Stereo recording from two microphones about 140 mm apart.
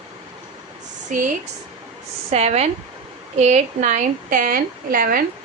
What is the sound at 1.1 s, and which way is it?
Speech, 60° right (ahead or behind).